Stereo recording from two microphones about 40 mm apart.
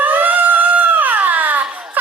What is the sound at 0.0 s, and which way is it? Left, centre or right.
Crying, right.